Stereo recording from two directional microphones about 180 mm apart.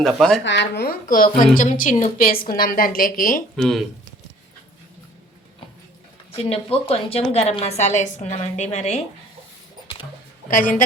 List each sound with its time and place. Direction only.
0.0 s speech: centre (ahead or behind)
0.4 s a woman's voice: 80° left; by 3.4 s 50° left (ahead or behind)
3.5 s speech: centre (ahead or behind)
6.3 s a woman's voice: 30° left (ahead or behind)
10.5 s a woman's voice: 50° left (ahead or behind)